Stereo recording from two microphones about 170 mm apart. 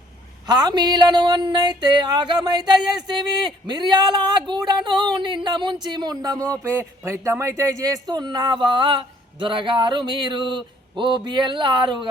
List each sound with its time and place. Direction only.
0.4 s speech: 25° right (ahead or behind)
3.7 s speech: 25° right (ahead or behind)